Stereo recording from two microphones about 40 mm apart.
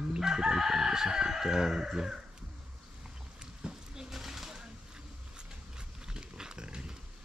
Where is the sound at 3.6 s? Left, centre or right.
Centre.